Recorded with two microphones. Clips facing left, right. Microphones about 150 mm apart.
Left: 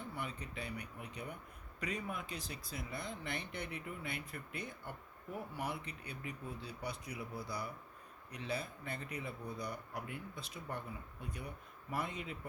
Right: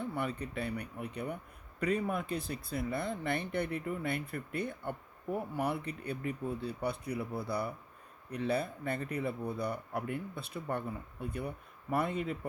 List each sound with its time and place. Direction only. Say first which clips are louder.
0.1 s speech: right 8 dB; 55° right (ahead or behind)